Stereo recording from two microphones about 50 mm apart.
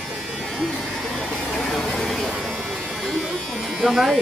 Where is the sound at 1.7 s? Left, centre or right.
Centre.